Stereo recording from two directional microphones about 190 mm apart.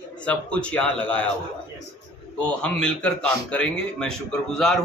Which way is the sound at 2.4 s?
5° left (ahead or behind).